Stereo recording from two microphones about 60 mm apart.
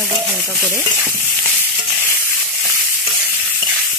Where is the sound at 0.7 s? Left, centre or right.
Right.